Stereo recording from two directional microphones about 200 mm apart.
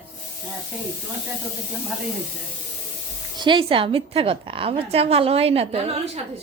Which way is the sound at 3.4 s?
25° right (ahead or behind).